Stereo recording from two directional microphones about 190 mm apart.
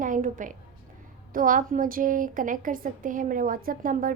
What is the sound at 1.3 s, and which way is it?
A woman's voice, 45° right (ahead or behind).